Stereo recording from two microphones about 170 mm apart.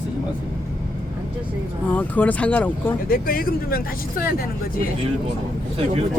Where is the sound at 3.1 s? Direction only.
60° left (ahead or behind).